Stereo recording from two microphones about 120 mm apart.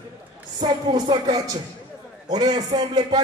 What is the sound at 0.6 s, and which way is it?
A man's voice, 40° right (ahead or behind).